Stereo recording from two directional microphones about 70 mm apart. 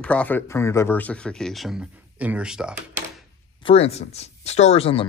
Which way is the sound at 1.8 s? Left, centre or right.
Centre.